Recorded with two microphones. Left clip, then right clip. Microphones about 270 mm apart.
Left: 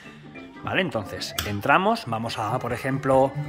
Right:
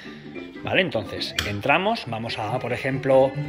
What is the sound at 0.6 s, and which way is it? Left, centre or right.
Speech, centre.